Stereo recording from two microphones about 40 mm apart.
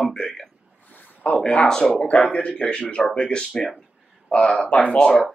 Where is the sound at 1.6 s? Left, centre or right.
Centre.